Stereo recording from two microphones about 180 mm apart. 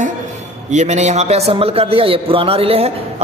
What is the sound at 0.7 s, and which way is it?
A man's voice, 40° right (ahead or behind).